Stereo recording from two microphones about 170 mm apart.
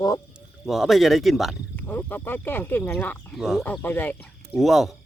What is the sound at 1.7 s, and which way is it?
Speech, 10° left (ahead or behind).